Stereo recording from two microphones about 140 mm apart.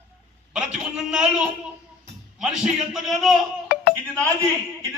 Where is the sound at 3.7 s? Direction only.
90° left.